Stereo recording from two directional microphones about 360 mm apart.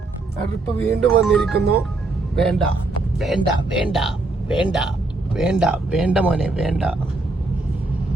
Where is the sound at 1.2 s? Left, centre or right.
Centre.